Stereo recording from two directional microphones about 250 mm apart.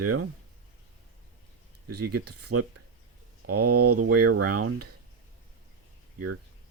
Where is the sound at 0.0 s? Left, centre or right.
Right.